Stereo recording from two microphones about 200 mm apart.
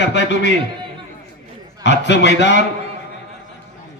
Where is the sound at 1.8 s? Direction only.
60° left (ahead or behind).